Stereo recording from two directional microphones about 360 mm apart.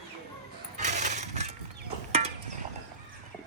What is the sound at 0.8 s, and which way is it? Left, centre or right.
Coin, centre.